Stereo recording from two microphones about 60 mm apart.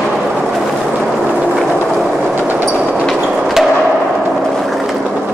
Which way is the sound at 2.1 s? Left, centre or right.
Centre.